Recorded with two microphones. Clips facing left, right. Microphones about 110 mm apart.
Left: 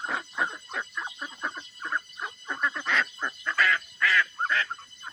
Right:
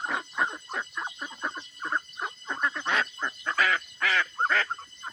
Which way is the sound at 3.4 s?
20° right (ahead or behind).